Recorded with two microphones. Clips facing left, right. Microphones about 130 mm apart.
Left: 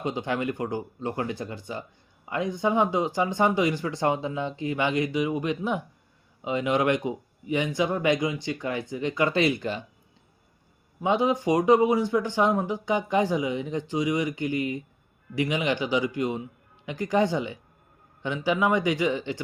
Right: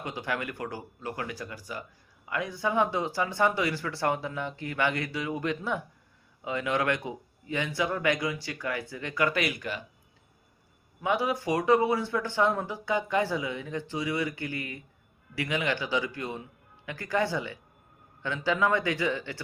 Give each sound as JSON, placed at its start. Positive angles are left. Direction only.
{"t": 0.0, "sound": "speech", "side_deg": 20}
{"t": 11.0, "sound": "speech", "side_deg": 20}